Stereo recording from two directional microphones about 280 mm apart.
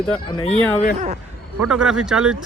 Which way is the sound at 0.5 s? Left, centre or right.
Centre.